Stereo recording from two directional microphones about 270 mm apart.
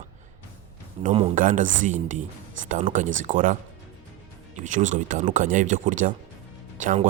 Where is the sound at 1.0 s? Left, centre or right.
Right.